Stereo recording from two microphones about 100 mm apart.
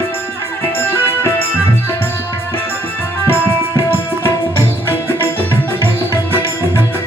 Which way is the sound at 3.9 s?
20° left (ahead or behind).